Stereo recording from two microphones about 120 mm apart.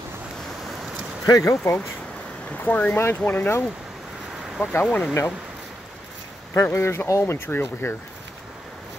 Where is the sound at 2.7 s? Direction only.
15° left (ahead or behind).